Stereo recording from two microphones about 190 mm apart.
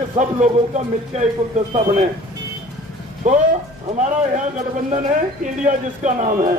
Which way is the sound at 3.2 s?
40° right (ahead or behind).